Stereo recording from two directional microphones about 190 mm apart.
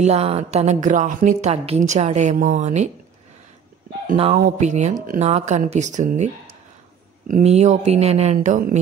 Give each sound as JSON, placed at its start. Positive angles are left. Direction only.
{"t": 0.0, "sound": "a woman's voice", "side_deg": -30}
{"t": 4.6, "sound": "a woman's voice", "side_deg": -35}